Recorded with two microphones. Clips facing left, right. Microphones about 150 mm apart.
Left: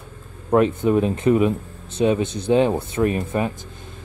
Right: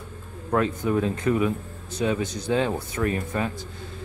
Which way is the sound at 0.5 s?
25° left (ahead or behind).